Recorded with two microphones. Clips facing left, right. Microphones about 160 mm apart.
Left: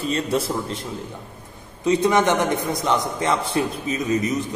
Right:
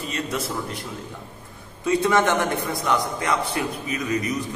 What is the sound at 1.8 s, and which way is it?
A man's voice, 20° left (ahead or behind).